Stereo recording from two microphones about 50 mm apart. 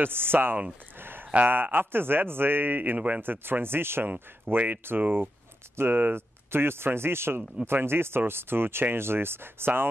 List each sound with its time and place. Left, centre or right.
0.0 s speech: right
0.9 s a sound: right
1.5 s speech: right
3.2 s speech: right